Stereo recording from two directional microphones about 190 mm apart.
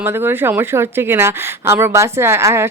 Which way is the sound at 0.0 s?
10° right (ahead or behind).